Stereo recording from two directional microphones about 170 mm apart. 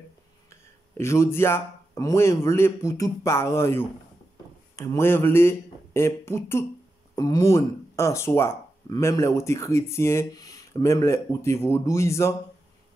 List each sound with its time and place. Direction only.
0.5 s a man's voice: 15° left (ahead or behind)